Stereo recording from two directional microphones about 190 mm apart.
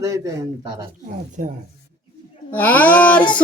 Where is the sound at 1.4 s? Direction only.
45° right (ahead or behind).